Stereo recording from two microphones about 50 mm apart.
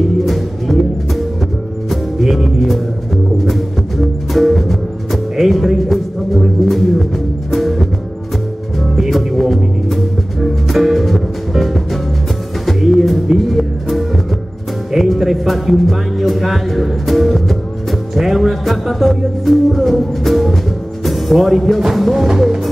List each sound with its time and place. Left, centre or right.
0.2 s music: centre
8.9 s music: centre
14.9 s speech: centre
21.0 s music: centre